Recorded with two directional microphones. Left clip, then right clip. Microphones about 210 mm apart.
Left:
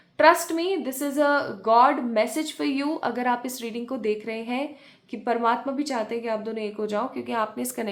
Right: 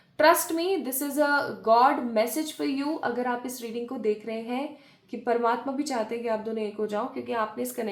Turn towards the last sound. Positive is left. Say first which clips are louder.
# left 2 dB
turn(degrees=30)  # may be behind; listen again after turning